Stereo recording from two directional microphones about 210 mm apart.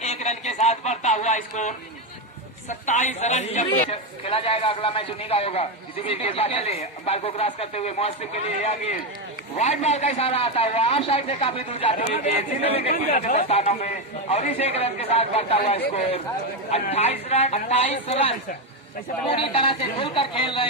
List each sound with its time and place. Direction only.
0.0 s a sound: 30° left (ahead or behind)
2.6 s a man's voice: 35° left (ahead or behind)
9.6 s a man's voice: 30° left (ahead or behind)
12.9 s a man's voice: 40° left (ahead or behind); by 20.7 s 25° left (ahead or behind)